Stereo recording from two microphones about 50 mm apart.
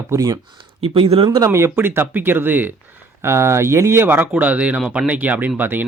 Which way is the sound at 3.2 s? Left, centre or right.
Right.